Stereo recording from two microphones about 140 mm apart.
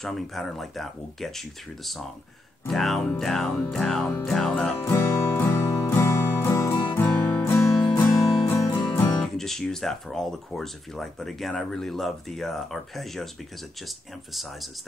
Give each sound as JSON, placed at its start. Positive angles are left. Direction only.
{"t": 0.0, "sound": "speech", "side_deg": 0}
{"t": 2.7, "sound": "speech", "side_deg": 0}
{"t": 4.8, "sound": "music", "side_deg": 20}
{"t": 9.2, "sound": "speech", "side_deg": 0}